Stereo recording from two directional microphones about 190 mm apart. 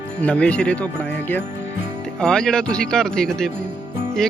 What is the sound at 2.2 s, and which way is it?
Speech, 5° left (ahead or behind).